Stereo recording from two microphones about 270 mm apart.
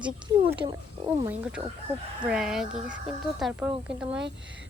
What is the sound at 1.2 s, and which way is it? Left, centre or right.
Speech, centre.